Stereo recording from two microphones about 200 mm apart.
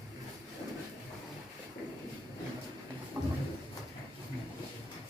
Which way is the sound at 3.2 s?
15° right (ahead or behind).